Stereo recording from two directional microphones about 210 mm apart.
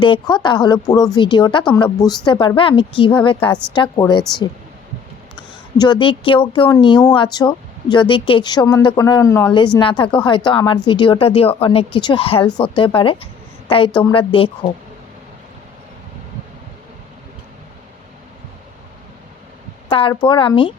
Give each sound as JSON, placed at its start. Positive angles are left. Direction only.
{"t": 0.0, "sound": "a woman's voice", "side_deg": 25}
{"t": 5.7, "sound": "a woman's voice", "side_deg": 20}
{"t": 19.9, "sound": "a woman's voice", "side_deg": 25}